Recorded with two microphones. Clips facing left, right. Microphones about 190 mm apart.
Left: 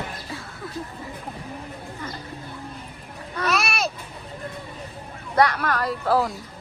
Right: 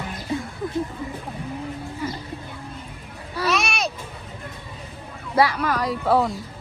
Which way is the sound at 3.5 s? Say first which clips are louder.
Even; centre (ahead or behind).